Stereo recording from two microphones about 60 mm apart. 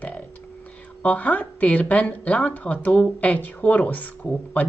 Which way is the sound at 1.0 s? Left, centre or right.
Left.